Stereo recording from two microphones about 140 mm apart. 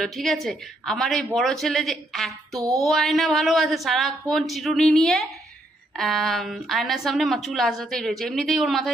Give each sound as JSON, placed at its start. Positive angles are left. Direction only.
{"t": 0.0, "sound": "a woman's voice", "side_deg": 0}